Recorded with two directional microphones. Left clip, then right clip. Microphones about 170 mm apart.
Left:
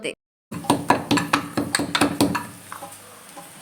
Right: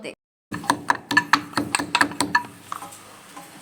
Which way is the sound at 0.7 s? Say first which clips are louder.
Left 3 dB; 25° right (ahead or behind).